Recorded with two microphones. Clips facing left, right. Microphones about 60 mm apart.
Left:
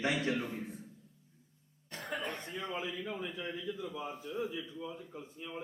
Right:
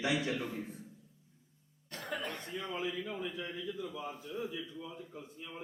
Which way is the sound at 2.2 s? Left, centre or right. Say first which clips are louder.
Left 1 dB; left.